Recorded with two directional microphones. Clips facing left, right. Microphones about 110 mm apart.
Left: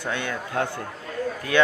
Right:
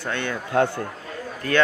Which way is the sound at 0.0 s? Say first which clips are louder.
Right 1 dB; 10° left (ahead or behind).